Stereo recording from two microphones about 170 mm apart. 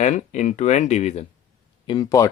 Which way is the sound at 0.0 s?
45° left (ahead or behind).